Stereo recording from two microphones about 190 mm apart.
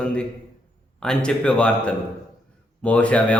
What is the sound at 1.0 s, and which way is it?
Mantra, 5° left (ahead or behind).